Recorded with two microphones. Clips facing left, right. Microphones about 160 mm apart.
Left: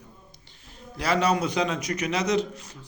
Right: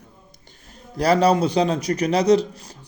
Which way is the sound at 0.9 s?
40° right (ahead or behind).